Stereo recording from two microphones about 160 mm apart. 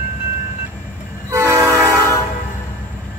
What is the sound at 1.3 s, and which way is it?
Train, 15° right (ahead or behind).